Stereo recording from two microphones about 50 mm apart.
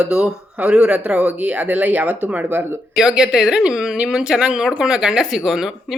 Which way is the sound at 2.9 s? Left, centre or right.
Centre.